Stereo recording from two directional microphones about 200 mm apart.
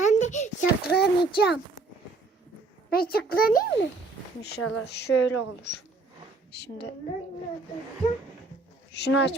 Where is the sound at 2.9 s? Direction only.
50° left (ahead or behind).